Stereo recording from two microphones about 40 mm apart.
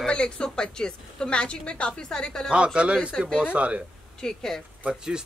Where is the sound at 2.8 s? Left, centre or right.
Right.